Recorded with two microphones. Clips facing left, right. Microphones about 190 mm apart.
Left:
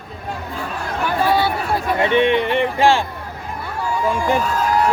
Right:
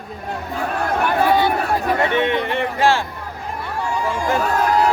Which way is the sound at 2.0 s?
20° left (ahead or behind).